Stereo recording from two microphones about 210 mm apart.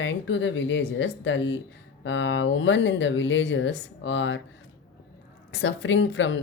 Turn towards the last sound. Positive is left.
turn(degrees=60)  # may be behind; listen again after turning